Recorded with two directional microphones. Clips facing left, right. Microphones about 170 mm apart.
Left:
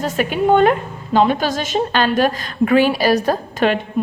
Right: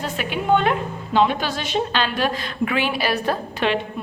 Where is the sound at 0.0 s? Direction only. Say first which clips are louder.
Left 7 dB; 45° left (ahead or behind).